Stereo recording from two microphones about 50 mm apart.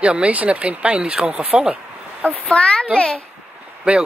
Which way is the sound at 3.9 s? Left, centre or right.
Right.